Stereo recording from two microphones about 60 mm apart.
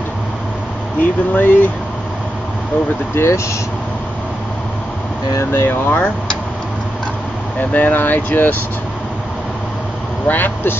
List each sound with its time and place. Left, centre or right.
1.3 s speech: left
3.2 s speech: left
5.4 s speech: left
7.7 s speech: left
10.2 s speech: left